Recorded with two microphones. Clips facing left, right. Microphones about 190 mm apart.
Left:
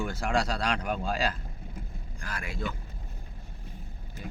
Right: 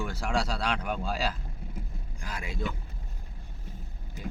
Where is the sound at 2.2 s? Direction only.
15° right (ahead or behind).